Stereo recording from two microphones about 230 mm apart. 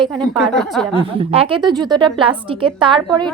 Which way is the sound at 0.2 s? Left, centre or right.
Centre.